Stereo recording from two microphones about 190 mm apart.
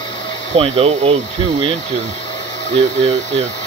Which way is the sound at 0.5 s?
30° right (ahead or behind).